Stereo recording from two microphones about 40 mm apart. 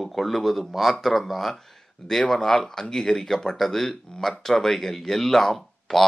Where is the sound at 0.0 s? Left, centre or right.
Centre.